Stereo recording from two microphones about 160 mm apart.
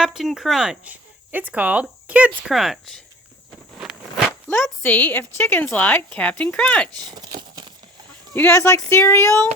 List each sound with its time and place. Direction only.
0.0 s speech: 5° right (ahead or behind)
4.3 s zipper: 15° left (ahead or behind)
4.6 s a woman's voice: 10° left (ahead or behind)
7.2 s a sound: 25° right (ahead or behind)
8.3 s a woman's voice: 15° left (ahead or behind)